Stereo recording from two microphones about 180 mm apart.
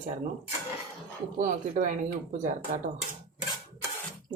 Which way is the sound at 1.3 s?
45° right (ahead or behind).